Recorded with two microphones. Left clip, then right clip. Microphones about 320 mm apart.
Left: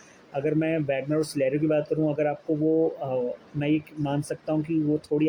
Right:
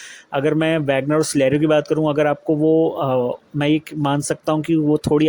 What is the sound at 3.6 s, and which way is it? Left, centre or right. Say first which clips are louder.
Speech: right 8 dB; right.